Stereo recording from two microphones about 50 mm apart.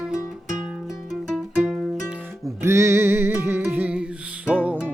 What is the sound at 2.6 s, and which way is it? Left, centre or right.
Music, right.